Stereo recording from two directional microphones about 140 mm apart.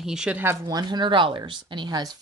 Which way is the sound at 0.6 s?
30° right (ahead or behind).